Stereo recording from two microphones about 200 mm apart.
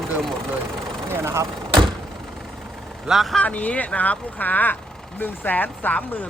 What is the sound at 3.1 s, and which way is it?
Speech, centre (ahead or behind).